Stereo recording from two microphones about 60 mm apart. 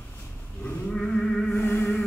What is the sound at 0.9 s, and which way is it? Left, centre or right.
Music, centre.